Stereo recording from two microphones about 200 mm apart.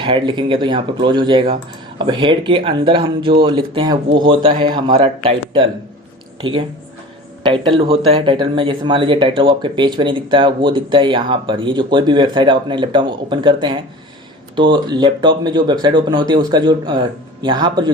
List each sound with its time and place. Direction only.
0.0 s speech: 25° right (ahead or behind)